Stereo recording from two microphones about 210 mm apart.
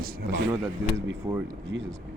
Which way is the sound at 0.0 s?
50° right (ahead or behind).